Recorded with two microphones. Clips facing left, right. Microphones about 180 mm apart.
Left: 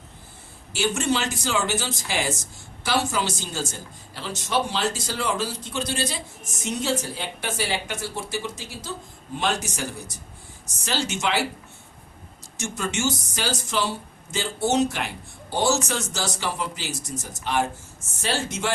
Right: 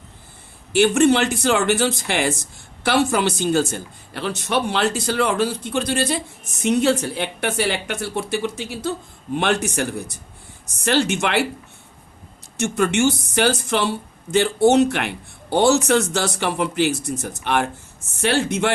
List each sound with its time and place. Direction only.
0.7 s speech: 60° right (ahead or behind)
12.5 s speech: 60° right (ahead or behind)